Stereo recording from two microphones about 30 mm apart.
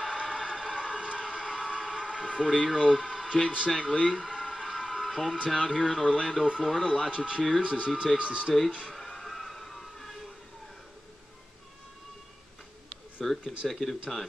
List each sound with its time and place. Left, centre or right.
0.0 s crowd: right
5.7 s speech: centre
6.8 s speech: right
9.2 s music: centre
13.2 s speech: centre